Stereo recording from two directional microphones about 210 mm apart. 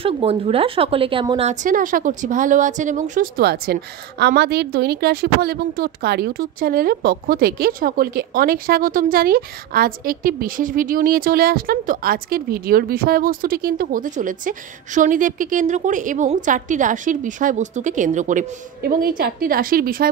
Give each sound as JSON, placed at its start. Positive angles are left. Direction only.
{"t": 0.0, "sound": "a woman's voice", "side_deg": -25}